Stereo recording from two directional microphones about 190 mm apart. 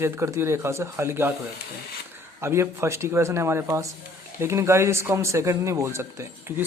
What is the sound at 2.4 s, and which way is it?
Speech, 15° right (ahead or behind).